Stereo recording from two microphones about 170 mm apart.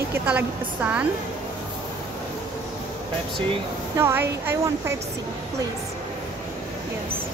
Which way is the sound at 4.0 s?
15° right (ahead or behind).